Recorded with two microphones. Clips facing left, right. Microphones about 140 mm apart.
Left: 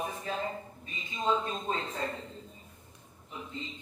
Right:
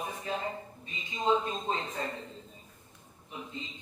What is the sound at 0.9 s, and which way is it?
Speech, 25° right (ahead or behind).